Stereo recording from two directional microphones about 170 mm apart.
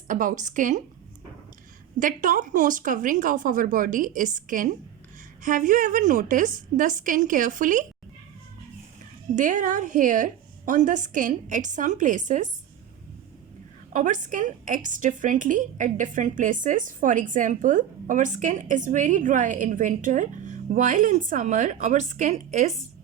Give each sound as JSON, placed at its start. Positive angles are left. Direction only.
{"t": 0.1, "sound": "a woman's voice", "side_deg": -50}
{"t": 2.0, "sound": "a woman's voice", "side_deg": -50}
{"t": 9.3, "sound": "a woman's voice", "side_deg": -50}
{"t": 13.9, "sound": "a woman's voice", "side_deg": -50}